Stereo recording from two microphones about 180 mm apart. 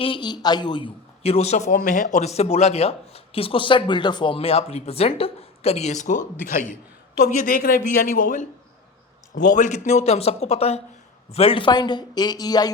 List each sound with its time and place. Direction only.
0.0 s a man's voice: 25° left (ahead or behind); by 8.4 s 45° left (ahead or behind)
9.5 s a man's voice: 45° left (ahead or behind); by 12.7 s 20° left (ahead or behind)